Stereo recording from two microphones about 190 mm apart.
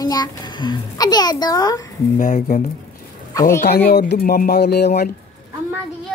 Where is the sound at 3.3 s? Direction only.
15° left (ahead or behind).